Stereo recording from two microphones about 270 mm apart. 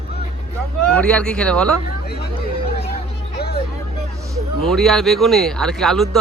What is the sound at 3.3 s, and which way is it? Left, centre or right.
Hubbub, left.